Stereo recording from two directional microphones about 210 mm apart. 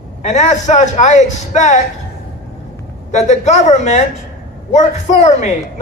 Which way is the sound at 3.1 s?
35° left (ahead or behind).